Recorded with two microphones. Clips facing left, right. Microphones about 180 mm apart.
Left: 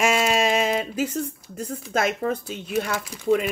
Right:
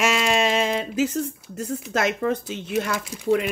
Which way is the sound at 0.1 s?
45° left (ahead or behind).